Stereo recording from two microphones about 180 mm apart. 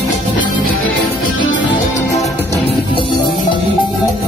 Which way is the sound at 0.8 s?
90° left.